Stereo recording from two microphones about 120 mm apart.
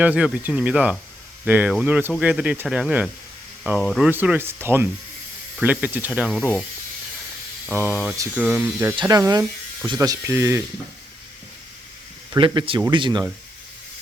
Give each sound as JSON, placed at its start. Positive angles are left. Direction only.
{"t": 0.0, "sound": "speech", "side_deg": -10}
{"t": 4.1, "sound": "speech", "side_deg": -15}
{"t": 6.4, "sound": "speech", "side_deg": 10}
{"t": 7.7, "sound": "speech", "side_deg": -15}
{"t": 9.0, "sound": "speech", "side_deg": -30}
{"t": 12.4, "sound": "speech", "side_deg": -45}